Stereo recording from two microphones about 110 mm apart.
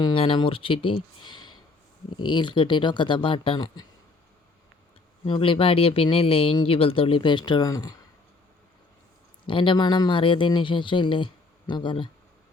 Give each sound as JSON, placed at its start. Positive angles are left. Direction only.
{"t": 0.0, "sound": "speech", "side_deg": 50}
{"t": 5.2, "sound": "speech", "side_deg": 55}
{"t": 9.5, "sound": "speech", "side_deg": 50}